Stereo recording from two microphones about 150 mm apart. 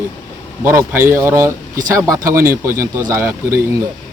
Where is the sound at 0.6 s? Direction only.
15° right (ahead or behind).